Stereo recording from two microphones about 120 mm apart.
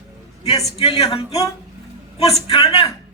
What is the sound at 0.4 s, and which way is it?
Speech, 55° left (ahead or behind).